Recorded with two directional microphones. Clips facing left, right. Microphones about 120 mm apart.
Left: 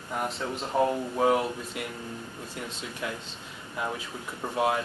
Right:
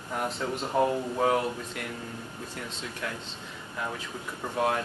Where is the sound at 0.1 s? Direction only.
Centre (ahead or behind).